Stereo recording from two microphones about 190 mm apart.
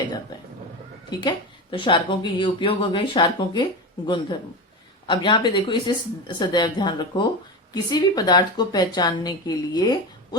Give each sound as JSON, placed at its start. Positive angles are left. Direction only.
{"t": 1.1, "sound": "a woman's voice", "side_deg": 25}